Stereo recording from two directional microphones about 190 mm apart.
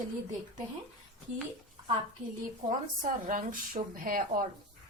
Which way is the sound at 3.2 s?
45° right (ahead or behind).